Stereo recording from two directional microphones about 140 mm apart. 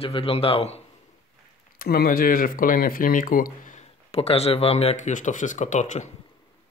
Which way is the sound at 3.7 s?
50° left (ahead or behind).